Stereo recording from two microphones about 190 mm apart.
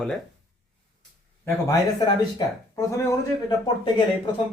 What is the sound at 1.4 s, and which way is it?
Speech, 20° left (ahead or behind).